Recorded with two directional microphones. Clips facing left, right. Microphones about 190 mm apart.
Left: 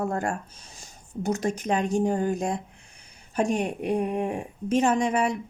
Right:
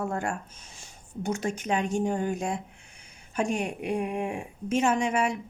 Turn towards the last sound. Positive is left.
turn(degrees=40)  # may be behind; listen again after turning